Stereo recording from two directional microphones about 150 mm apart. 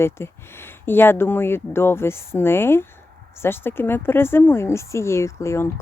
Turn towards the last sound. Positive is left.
turn(degrees=20)  # may be behind; listen again after turning